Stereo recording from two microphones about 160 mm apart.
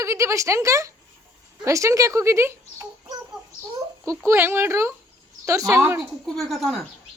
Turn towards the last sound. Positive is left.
turn(degrees=0)  # may be behind; listen again after turning